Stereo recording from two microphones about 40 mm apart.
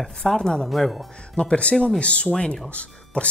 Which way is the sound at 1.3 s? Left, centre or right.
Left.